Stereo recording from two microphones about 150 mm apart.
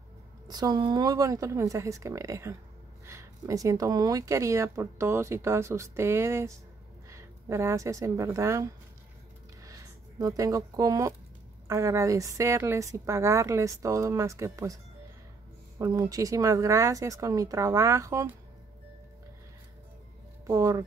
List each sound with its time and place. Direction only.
0.5 s a woman's voice: 25° right (ahead or behind)
15.8 s speech: 25° right (ahead or behind)
20.4 s speech: 20° right (ahead or behind)